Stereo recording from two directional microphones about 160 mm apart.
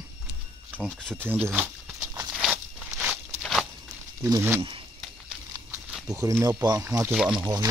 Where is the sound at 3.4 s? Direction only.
Centre (ahead or behind).